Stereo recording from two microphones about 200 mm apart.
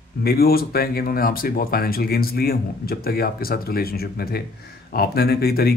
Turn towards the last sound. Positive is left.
turn(degrees=50)  # may be behind; listen again after turning